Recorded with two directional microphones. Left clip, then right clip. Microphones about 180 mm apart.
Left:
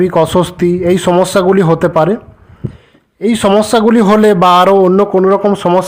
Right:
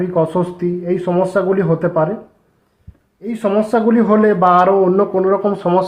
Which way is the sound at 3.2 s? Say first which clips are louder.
Left 7 dB; 45° left (ahead or behind).